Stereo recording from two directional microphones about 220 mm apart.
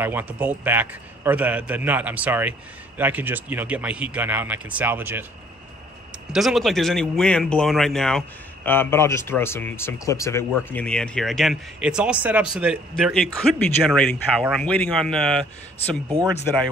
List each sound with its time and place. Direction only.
0.0 s a man's voice: 10° right (ahead or behind)
6.3 s speech: centre (ahead or behind)
16.1 s speech: 20° right (ahead or behind)